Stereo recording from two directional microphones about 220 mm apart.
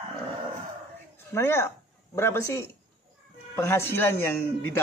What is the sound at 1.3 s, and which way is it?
A man's voice, 10° left (ahead or behind).